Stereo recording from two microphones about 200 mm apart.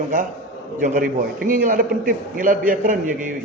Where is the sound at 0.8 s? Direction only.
45° right (ahead or behind).